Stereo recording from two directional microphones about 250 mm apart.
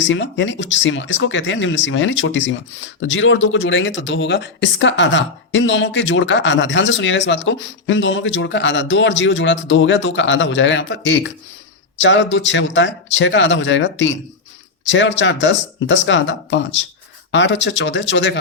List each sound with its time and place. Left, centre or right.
0.0 s speech: left